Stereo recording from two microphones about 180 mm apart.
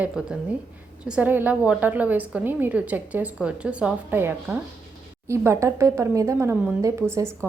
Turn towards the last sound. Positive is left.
turn(degrees=-15)  # may be behind; listen again after turning